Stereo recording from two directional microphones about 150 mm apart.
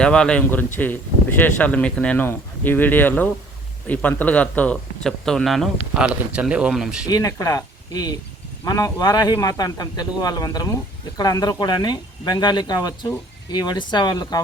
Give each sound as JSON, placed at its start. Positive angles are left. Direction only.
{"t": 0.0, "sound": "a man's voice", "side_deg": 5}
{"t": 7.1, "sound": "speech", "side_deg": 20}